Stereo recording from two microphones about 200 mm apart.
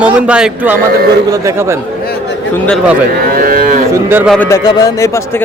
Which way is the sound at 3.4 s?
45° right (ahead or behind).